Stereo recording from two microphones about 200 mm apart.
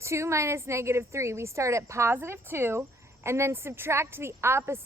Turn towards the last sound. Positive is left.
turn(degrees=-10)  # may be behind; listen again after turning